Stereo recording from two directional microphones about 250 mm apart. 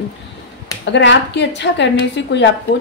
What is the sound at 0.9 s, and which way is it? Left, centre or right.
A woman's voice, left.